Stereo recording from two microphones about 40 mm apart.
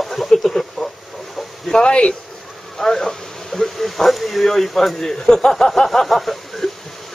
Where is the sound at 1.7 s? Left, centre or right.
Left.